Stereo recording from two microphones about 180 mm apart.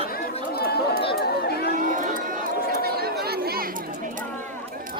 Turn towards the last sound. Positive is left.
turn(degrees=-60)  # may be behind; listen again after turning